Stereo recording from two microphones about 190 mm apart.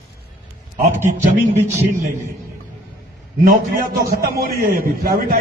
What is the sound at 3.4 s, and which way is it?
A man's voice, 50° right (ahead or behind).